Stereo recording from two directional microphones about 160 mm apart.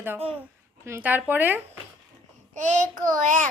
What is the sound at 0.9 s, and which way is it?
Speech, 15° right (ahead or behind).